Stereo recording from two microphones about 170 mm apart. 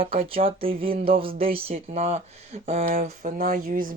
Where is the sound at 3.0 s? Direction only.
50° right (ahead or behind).